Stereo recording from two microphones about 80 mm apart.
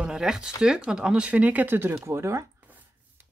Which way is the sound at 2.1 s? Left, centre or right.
Right.